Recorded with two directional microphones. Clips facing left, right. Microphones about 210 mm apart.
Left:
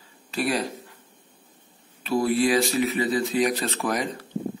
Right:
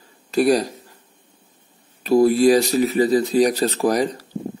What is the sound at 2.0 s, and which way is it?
Speech, 40° right (ahead or behind).